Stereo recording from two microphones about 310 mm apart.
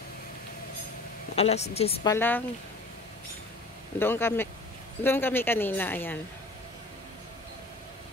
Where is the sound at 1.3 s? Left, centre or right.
Centre.